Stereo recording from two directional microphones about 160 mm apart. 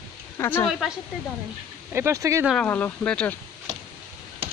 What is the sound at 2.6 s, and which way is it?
Speech, 10° left (ahead or behind).